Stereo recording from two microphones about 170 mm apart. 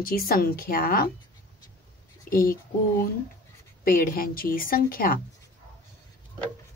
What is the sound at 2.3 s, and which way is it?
Speech, 55° left (ahead or behind).